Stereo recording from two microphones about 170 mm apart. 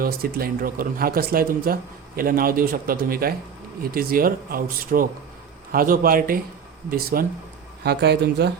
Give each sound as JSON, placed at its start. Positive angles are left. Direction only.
{"t": 0.0, "sound": "speech", "side_deg": -60}
{"t": 7.9, "sound": "speech", "side_deg": -75}